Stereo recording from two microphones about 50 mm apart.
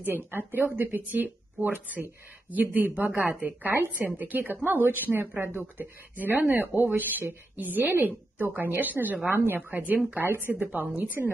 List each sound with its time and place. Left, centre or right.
0.3 s speech: right
11.0 s speech: right